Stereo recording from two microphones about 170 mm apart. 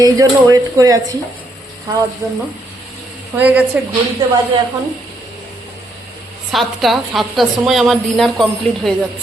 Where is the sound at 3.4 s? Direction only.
10° right (ahead or behind).